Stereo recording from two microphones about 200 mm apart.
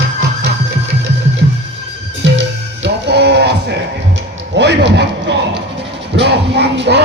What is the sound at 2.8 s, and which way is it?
Music, 60° right (ahead or behind).